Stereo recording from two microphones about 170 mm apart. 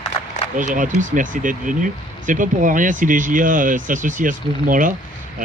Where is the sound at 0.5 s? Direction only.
50° right (ahead or behind).